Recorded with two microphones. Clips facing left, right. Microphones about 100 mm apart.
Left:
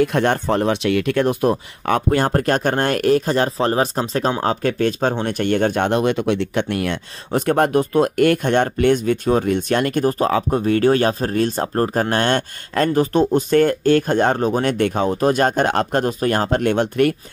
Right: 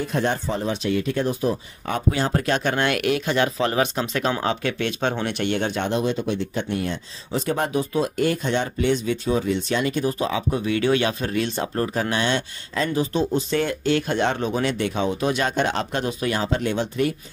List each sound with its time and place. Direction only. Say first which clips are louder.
0.0 s speech: left 6 dB; 65° left (ahead or behind)